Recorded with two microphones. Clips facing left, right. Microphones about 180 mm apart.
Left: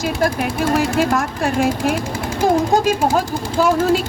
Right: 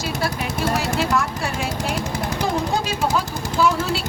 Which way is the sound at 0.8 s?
50° left (ahead or behind).